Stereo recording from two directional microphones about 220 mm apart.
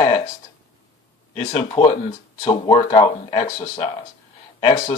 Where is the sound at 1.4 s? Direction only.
30° left (ahead or behind).